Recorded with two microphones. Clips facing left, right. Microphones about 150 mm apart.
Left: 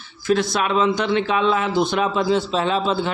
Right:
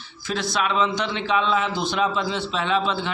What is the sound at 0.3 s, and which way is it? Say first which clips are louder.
A man's voice: left 5 dB; 50° left (ahead or behind).